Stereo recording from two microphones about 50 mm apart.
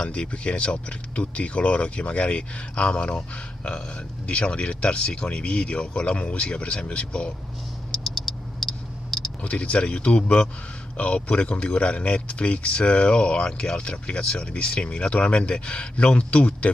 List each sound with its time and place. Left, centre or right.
0.0 s speech: left
8.6 s clicking: centre
9.4 s speech: left